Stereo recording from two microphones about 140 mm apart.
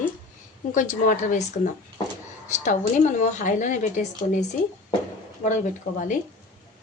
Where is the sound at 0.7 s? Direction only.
65° left (ahead or behind).